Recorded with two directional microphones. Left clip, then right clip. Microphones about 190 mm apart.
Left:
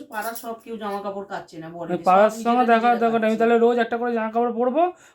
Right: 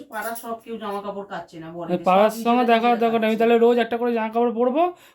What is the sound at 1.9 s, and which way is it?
Speech, 20° right (ahead or behind).